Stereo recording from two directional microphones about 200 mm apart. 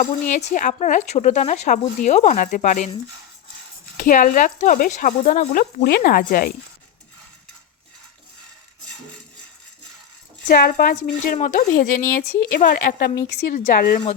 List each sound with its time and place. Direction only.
0.0 s speech: 35° left (ahead or behind)
3.9 s speech: 45° left (ahead or behind)
5.8 s a woman's voice: 50° left (ahead or behind)
10.5 s a woman's voice: 45° left (ahead or behind)